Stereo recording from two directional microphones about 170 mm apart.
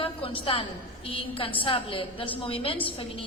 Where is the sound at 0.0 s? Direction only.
30° left (ahead or behind).